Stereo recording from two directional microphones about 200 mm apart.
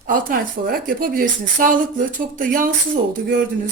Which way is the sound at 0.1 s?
45° right (ahead or behind).